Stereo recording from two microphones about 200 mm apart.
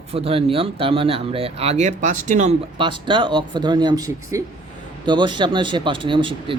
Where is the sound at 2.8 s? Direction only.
25° right (ahead or behind).